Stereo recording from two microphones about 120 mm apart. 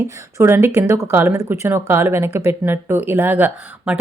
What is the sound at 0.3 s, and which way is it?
Speech, 20° right (ahead or behind).